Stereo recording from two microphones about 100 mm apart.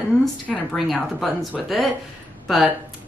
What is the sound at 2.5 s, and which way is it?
Speech, centre (ahead or behind).